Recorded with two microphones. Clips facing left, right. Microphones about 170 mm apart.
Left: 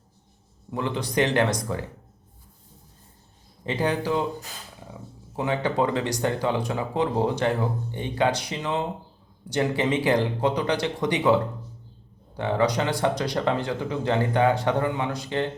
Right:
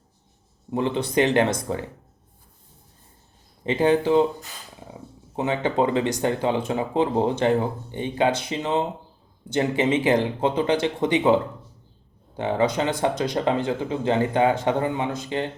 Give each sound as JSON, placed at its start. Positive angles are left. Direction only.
{"t": 0.7, "sound": "speech", "side_deg": -20}
{"t": 3.7, "sound": "speech", "side_deg": -25}
{"t": 5.4, "sound": "speech", "side_deg": -20}
{"t": 12.4, "sound": "speech", "side_deg": -20}